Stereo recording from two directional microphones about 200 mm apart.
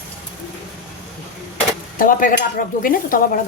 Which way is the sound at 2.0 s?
45° left (ahead or behind).